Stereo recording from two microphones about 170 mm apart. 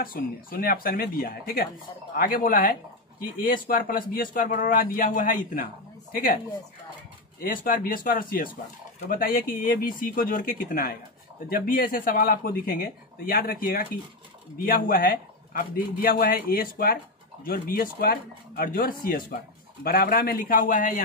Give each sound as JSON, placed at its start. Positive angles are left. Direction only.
{"t": 0.0, "sound": "speech", "side_deg": 60}
{"t": 7.3, "sound": "speech", "side_deg": 55}